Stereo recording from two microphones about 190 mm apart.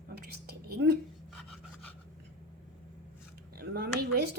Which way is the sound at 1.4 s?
5° left (ahead or behind).